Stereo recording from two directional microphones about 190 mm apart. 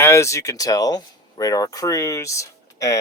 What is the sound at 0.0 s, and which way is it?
Speech, 15° left (ahead or behind).